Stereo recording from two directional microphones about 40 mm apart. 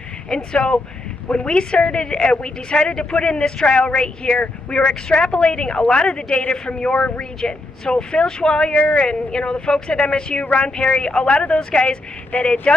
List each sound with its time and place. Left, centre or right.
0.3 s a woman's voice: left
11.3 s a woman's voice: left
12.3 s speech: left